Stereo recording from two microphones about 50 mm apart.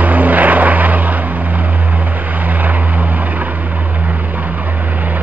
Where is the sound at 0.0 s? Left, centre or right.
Right.